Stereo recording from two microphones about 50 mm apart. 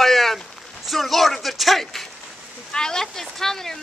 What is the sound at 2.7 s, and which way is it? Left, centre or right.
Speech, centre.